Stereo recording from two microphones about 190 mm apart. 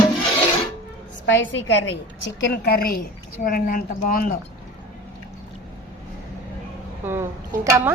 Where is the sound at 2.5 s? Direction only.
55° left (ahead or behind).